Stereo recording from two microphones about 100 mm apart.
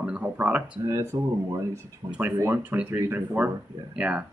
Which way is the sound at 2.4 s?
20° right (ahead or behind).